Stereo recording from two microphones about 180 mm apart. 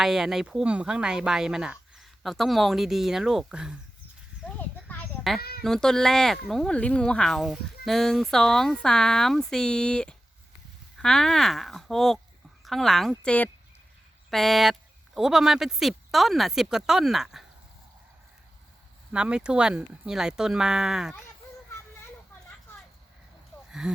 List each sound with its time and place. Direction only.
0.0 s speech: centre (ahead or behind)
4.4 s children playing: 10° left (ahead or behind)
5.4 s speech: 60° left (ahead or behind)
5.6 s speech: 5° left (ahead or behind)
19.1 s speech: 5° right (ahead or behind)
23.8 s speech: 5° right (ahead or behind)